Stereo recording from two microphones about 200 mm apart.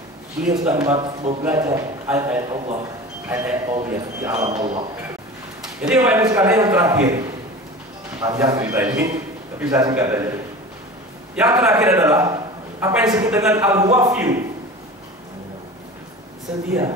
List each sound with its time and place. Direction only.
0.9 s speech: 25° right (ahead or behind)
2.5 s a man's voice: 30° right (ahead or behind)
3.3 s speech: 10° right (ahead or behind)
5.8 s a man's voice: 10° right (ahead or behind)
16.5 s speech: 5° right (ahead or behind)